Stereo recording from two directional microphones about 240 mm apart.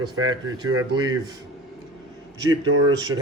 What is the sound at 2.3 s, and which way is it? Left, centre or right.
Speech, centre.